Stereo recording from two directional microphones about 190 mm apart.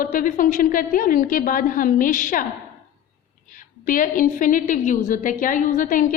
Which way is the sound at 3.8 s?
45° left (ahead or behind).